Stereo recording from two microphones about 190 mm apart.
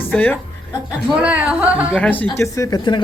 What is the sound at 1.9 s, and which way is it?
Speech, 10° left (ahead or behind).